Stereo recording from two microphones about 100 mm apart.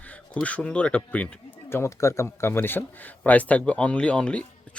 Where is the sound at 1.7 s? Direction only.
30° left (ahead or behind).